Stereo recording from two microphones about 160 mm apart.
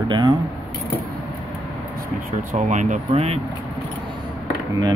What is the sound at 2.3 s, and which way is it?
Speech, 50° right (ahead or behind).